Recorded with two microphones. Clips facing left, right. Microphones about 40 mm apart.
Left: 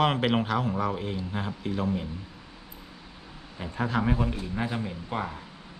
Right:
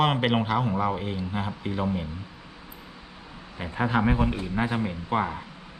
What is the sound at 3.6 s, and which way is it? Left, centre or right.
Speech, right.